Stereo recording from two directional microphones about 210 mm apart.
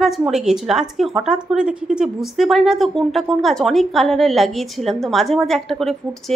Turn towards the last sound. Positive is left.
turn(degrees=0)  # may be behind; listen again after turning